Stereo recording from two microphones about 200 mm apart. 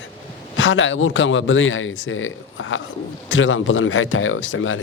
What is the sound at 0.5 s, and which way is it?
Speech, 75° left (ahead or behind).